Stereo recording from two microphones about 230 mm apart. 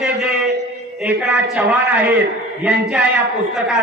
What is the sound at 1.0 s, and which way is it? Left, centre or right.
A man's voice, centre.